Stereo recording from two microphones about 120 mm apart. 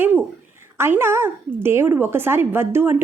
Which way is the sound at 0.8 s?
20° right (ahead or behind).